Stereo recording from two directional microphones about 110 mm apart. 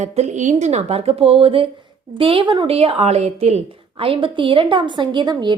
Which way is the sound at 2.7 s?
65° right (ahead or behind).